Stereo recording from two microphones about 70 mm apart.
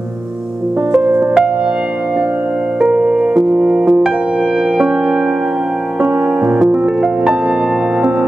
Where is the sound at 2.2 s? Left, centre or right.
Right.